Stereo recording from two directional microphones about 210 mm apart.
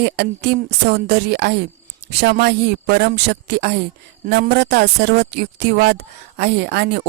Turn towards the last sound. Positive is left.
turn(degrees=-50)  # may be behind; listen again after turning